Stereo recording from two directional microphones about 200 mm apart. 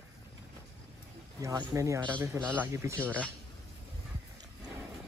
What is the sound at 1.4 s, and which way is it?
A man's voice, 15° right (ahead or behind).